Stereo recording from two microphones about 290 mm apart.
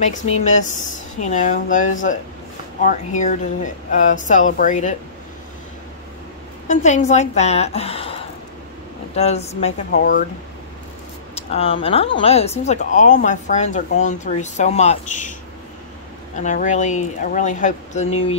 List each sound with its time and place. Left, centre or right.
0.0 s speech: left
6.7 s speech: left
11.3 s speech: left
16.3 s speech: left